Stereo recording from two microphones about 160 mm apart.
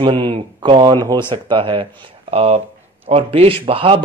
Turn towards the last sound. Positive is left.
turn(degrees=-35)  # may be behind; listen again after turning